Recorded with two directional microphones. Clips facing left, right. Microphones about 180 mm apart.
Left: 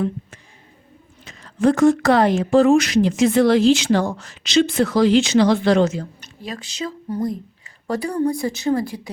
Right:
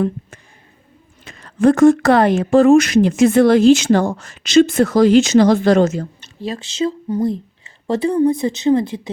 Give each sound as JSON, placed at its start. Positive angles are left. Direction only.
{"t": 1.2, "sound": "a woman's voice", "side_deg": -55}
{"t": 6.1, "sound": "a woman's voice", "side_deg": -25}